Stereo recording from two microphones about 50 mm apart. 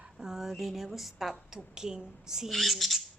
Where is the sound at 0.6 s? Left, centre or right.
Centre.